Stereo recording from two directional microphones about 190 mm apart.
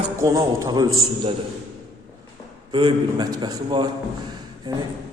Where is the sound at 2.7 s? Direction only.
25° right (ahead or behind).